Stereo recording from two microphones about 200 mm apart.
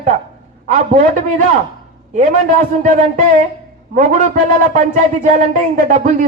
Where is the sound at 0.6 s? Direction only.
35° right (ahead or behind).